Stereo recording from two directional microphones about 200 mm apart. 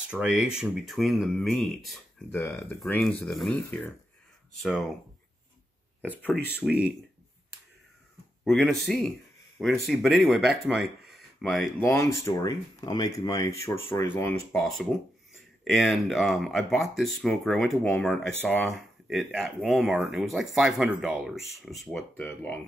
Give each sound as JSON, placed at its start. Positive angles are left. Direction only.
{"t": 0.1, "sound": "speech", "side_deg": -5}
{"t": 2.4, "sound": "speech", "side_deg": 10}
{"t": 6.0, "sound": "speech", "side_deg": 10}
{"t": 6.6, "sound": "speech", "side_deg": -5}
{"t": 8.5, "sound": "speech", "side_deg": 0}
{"t": 11.8, "sound": "speech", "side_deg": 15}